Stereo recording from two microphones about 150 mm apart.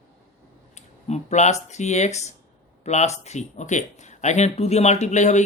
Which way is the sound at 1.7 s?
50° left (ahead or behind).